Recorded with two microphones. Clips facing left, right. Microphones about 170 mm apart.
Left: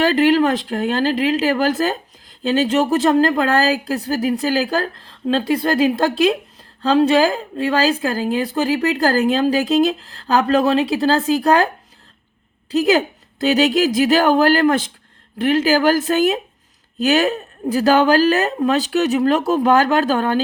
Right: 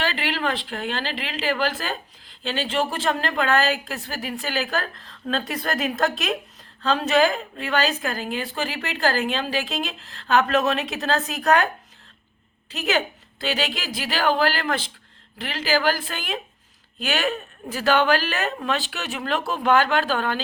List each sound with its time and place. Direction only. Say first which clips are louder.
0.0 s a woman's voice: left 12 dB; 45° left (ahead or behind)
12.7 s a woman's voice: left 9 dB; 35° left (ahead or behind)